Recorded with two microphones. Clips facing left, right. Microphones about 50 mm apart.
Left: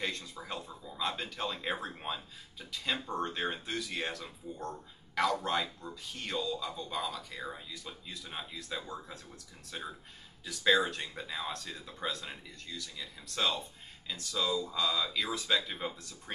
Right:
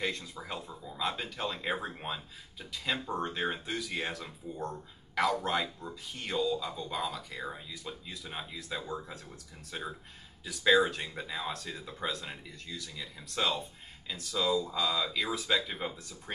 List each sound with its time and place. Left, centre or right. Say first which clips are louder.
0.0 s speech: right 2 dB; centre